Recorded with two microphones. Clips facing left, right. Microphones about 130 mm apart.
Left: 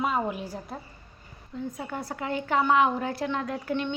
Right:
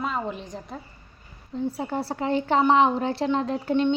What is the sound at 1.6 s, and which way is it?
A woman's voice, 30° right (ahead or behind).